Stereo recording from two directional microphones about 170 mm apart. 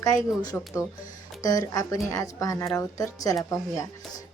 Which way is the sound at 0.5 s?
10° left (ahead or behind).